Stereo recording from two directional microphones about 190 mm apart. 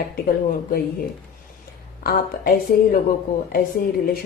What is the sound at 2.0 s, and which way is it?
Speech, 50° left (ahead or behind).